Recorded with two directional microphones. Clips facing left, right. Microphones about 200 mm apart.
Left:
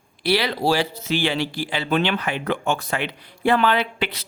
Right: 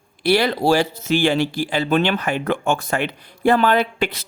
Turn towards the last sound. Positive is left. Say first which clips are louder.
# right 4 dB
turn(degrees=-45)  # may be behind; listen again after turning